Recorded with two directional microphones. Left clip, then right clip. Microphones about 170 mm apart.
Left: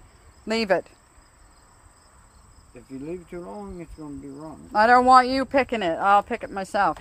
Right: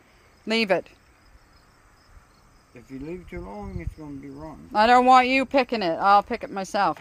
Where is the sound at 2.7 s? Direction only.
25° right (ahead or behind).